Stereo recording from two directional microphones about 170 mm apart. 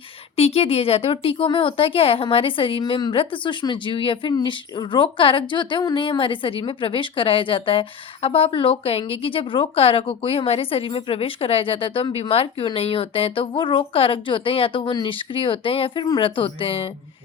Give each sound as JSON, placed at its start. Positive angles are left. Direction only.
{"t": 0.3, "sound": "a woman's voice", "side_deg": 35}